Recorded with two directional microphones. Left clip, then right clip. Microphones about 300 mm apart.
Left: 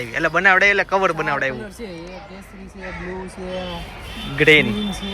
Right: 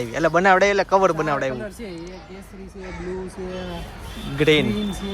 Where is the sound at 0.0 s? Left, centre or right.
Centre.